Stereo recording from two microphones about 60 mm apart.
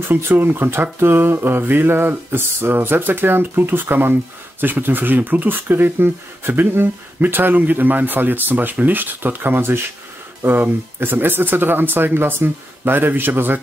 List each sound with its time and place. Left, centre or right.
0.1 s speech: right